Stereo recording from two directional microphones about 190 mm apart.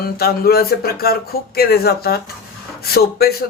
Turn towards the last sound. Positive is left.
turn(degrees=55)  # may be behind; listen again after turning